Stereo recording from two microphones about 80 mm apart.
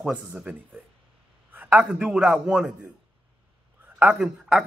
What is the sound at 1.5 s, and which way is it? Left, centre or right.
A man's voice, right.